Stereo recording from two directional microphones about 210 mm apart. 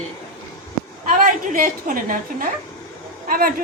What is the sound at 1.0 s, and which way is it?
A woman's voice, 40° right (ahead or behind).